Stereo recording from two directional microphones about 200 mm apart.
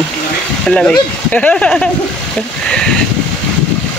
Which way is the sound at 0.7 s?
5° left (ahead or behind).